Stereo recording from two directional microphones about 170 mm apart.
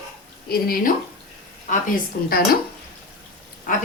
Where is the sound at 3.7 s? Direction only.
55° left (ahead or behind).